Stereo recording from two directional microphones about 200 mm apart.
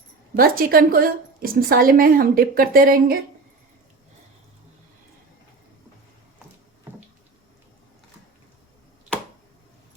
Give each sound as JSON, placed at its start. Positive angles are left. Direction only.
{"t": 0.3, "sound": "a woman's voice", "side_deg": -45}